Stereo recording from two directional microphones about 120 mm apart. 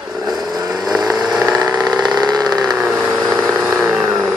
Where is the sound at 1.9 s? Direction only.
35° right (ahead or behind).